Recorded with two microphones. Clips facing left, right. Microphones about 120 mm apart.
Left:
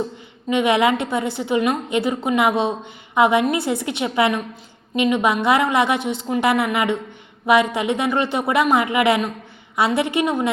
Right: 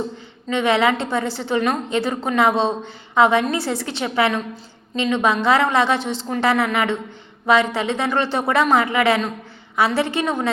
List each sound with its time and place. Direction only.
0.4 s a woman's voice: 15° left (ahead or behind)